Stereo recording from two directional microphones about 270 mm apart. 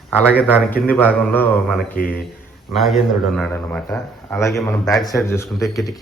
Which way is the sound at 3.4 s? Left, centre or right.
Centre.